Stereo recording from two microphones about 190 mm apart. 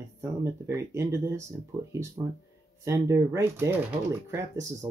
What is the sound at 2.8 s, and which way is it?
Speech, 15° right (ahead or behind).